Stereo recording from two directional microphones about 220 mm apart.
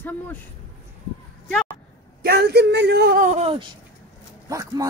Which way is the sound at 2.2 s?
45° right (ahead or behind).